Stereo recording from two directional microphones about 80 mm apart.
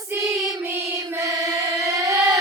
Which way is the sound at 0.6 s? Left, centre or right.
Right.